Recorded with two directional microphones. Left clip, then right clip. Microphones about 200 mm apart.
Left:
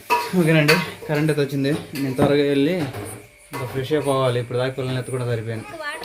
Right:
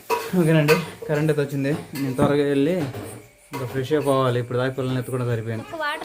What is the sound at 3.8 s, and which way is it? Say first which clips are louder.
A man's voice: even; centre (ahead or behind).